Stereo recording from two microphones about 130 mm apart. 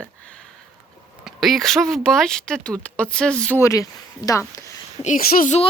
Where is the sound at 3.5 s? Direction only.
25° left (ahead or behind).